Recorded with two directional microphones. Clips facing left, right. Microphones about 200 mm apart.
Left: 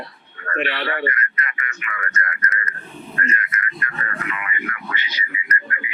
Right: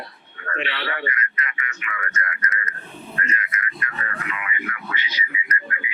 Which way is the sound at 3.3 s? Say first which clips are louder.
Left 2 dB; 50° left (ahead or behind).